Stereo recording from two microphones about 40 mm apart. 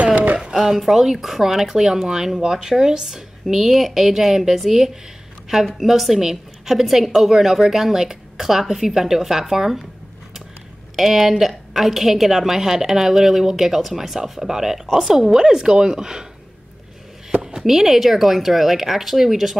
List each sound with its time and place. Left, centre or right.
0.0 s a sound: right
0.4 s a woman's voice: centre
11.0 s a woman's voice: centre
17.4 s speech: centre